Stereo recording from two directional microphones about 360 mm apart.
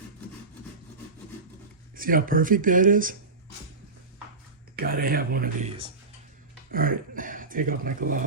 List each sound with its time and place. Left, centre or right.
2.0 s speech: right
4.8 s speech: right